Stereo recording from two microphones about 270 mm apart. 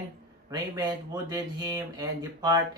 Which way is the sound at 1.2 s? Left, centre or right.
Centre.